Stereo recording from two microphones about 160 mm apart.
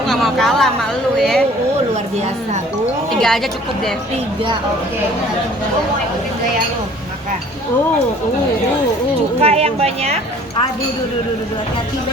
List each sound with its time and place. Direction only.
0.1 s speech: centre (ahead or behind)
3.2 s a woman's voice: centre (ahead or behind)
9.4 s speech: 40° right (ahead or behind)